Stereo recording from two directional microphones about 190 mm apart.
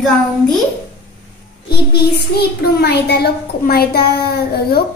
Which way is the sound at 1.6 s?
55° left (ahead or behind).